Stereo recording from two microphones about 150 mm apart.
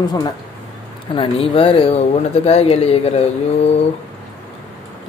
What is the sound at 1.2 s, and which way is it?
Speech, 35° left (ahead or behind).